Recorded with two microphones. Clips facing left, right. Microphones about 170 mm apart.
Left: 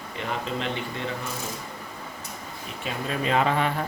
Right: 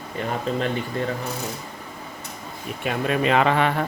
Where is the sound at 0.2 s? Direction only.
45° right (ahead or behind).